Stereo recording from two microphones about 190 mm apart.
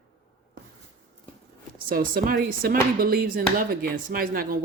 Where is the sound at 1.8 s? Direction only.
50° right (ahead or behind).